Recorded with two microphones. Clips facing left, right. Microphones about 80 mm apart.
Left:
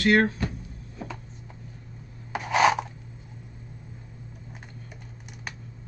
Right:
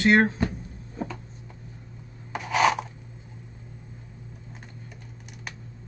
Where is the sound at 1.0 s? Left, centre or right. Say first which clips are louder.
Right 4 dB; right.